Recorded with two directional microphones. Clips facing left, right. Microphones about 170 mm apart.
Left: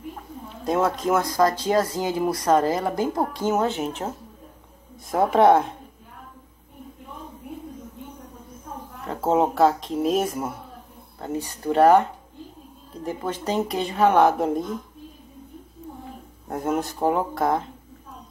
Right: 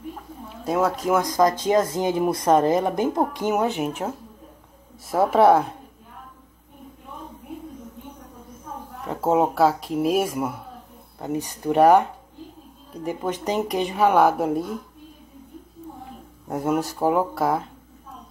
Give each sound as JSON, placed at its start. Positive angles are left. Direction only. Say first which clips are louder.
{"t": 0.7, "sound": "speech", "louder": "even", "side_deg": -5}
{"t": 5.1, "sound": "speech", "louder": "even", "side_deg": -5}
{"t": 9.0, "sound": "speech", "louder": "right 1 dB", "side_deg": -10}
{"t": 16.4, "sound": "speech", "louder": "right 2 dB", "side_deg": -10}